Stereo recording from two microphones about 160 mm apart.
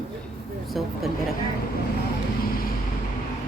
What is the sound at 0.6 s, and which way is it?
Speech, centre (ahead or behind).